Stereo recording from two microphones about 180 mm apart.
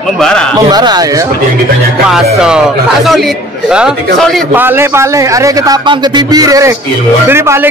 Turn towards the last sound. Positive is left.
turn(degrees=-15)  # may be behind; listen again after turning